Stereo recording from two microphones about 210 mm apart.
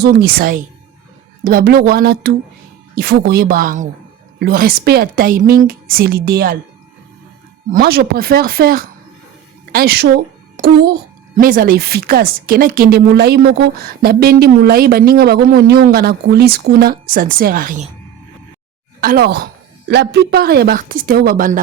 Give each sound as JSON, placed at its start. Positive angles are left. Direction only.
{"t": 0.3, "sound": "speech", "side_deg": -45}
{"t": 7.7, "sound": "speech", "side_deg": -45}
{"t": 10.6, "sound": "a child's voice", "side_deg": -35}
{"t": 18.9, "sound": "speech", "side_deg": -45}